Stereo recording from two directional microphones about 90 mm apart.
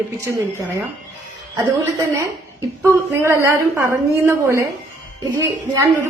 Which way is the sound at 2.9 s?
30° right (ahead or behind).